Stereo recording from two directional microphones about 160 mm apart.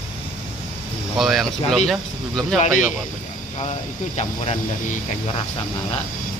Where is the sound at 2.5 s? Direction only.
50° left (ahead or behind).